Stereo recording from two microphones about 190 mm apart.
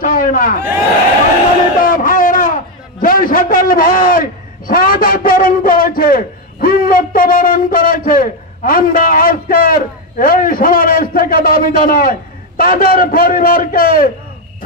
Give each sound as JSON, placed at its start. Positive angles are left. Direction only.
{"t": 0.0, "sound": "crowd", "side_deg": 45}
{"t": 1.8, "sound": "a man's voice", "side_deg": 45}